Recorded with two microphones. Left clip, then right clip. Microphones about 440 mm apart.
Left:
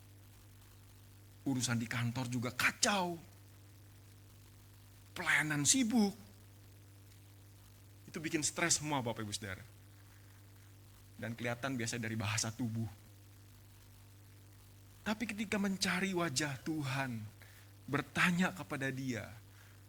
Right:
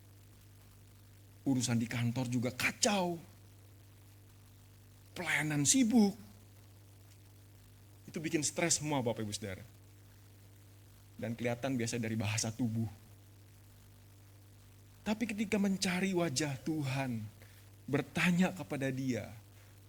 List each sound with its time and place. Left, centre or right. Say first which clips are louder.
1.5 s speech: right 3 dB; left
5.1 s speech: left 1 dB; left
8.1 s speech: right 2 dB; left
11.2 s speech: right 3 dB; left
15.0 s speech: right 2 dB; left